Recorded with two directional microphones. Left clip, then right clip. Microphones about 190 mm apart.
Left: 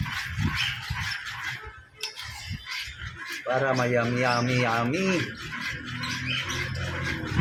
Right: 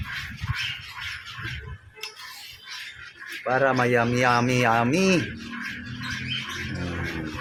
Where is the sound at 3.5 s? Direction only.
60° right (ahead or behind).